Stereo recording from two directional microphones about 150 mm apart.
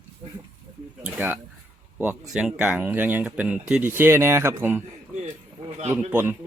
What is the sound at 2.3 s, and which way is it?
Speech, 5° right (ahead or behind).